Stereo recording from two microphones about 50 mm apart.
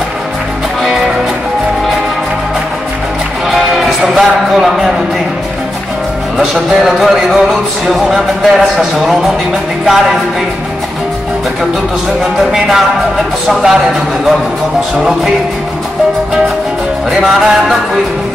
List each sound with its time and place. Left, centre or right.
3.5 s music: centre
6.3 s music: centre
12.2 s music: centre
13.5 s a man's voice: centre
17.1 s music: centre